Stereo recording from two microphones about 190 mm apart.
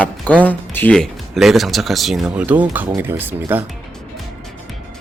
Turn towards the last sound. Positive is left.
turn(degrees=-10)  # may be behind; listen again after turning